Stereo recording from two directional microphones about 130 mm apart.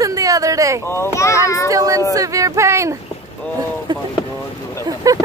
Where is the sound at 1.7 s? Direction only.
25° right (ahead or behind).